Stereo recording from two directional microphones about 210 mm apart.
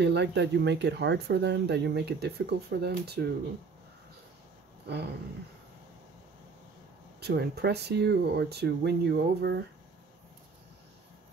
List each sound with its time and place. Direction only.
0.0 s speech: 55° right (ahead or behind)
4.8 s dog: 55° right (ahead or behind)
7.2 s speech: 50° right (ahead or behind)